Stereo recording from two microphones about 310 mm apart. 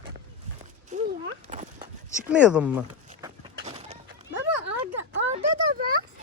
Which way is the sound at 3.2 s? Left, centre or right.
Centre.